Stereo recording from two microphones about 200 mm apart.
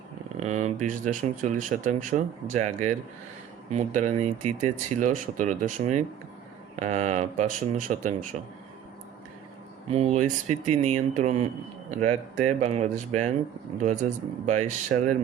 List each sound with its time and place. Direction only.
0.3 s speech: 35° right (ahead or behind)
9.9 s speech: 35° right (ahead or behind)